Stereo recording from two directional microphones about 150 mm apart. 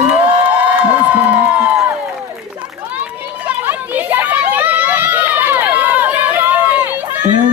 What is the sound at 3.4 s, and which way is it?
Children playing, 10° right (ahead or behind).